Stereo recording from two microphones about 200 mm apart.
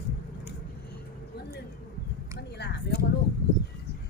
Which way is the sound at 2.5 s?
50° left (ahead or behind).